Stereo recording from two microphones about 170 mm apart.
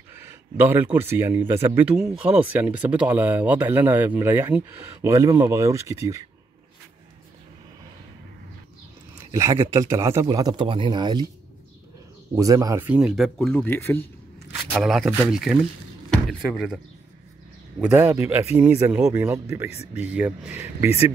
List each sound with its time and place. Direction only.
0.1 s a sound: 15° right (ahead or behind)
0.9 s speech: 15° right (ahead or behind)
9.3 s speech: 15° right (ahead or behind)
12.4 s speech: 20° right (ahead or behind); by 14.0 s 10° left (ahead or behind)
14.8 s speech: centre (ahead or behind)